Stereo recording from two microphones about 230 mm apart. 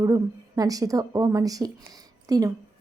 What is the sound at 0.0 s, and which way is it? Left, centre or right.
A woman's voice, centre.